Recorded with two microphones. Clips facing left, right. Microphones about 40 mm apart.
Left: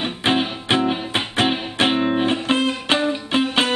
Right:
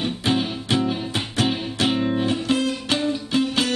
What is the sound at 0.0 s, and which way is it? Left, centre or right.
Music, left.